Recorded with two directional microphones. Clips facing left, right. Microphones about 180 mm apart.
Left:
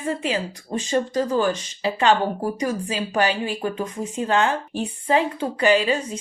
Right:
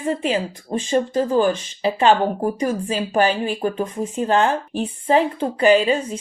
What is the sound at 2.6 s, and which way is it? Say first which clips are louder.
Speech: right 3 dB; 45° right (ahead or behind).